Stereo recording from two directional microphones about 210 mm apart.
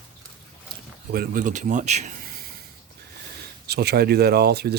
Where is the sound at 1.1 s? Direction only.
40° right (ahead or behind).